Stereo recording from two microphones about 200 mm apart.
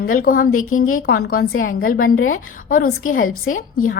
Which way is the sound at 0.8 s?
90° left.